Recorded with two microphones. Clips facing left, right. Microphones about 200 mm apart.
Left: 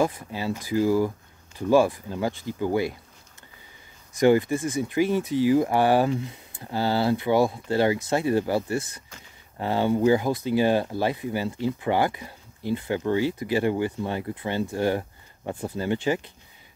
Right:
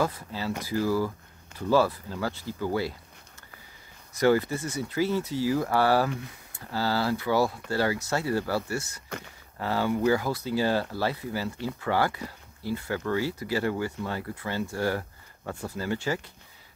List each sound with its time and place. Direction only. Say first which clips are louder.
0.0 s speech: left 4 dB; 15° left (ahead or behind)
4.2 s speech: left 4 dB; 15° left (ahead or behind)
9.1 s speech: right 13 dB; 65° right (ahead or behind)
9.6 s speech: left 4 dB; 20° left (ahead or behind)